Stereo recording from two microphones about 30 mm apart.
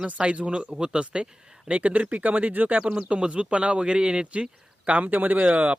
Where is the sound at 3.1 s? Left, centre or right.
Right.